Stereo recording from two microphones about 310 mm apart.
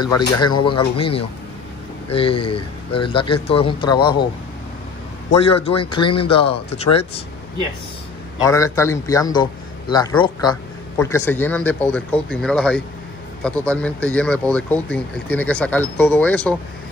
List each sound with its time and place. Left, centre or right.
0.0 s a man's voice: centre
5.4 s a man's voice: centre
8.4 s a man's voice: centre